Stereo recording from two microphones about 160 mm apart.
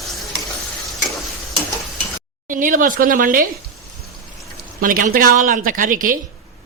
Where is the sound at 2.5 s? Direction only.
55° right (ahead or behind).